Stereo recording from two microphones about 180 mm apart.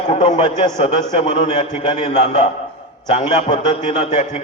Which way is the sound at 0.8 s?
35° left (ahead or behind).